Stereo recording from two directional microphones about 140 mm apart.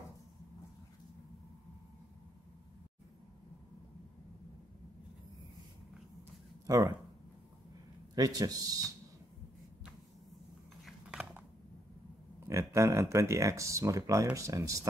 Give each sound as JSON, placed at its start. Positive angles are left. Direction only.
{"t": 6.6, "sound": "speech", "side_deg": -25}
{"t": 8.1, "sound": "speech", "side_deg": -25}
{"t": 10.9, "sound": "a sound", "side_deg": -10}
{"t": 12.4, "sound": "speech", "side_deg": -20}